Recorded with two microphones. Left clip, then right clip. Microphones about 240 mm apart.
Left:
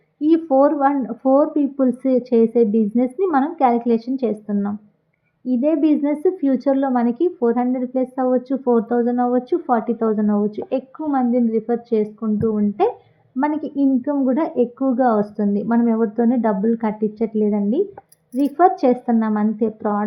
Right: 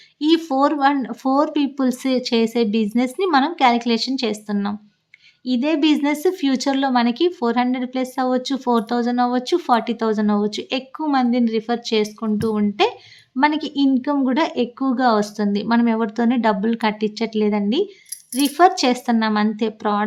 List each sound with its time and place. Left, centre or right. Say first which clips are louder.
0.2 s speech: left 2 dB; centre
13.5 s a woman's voice: even; right
14.0 s speech: even; centre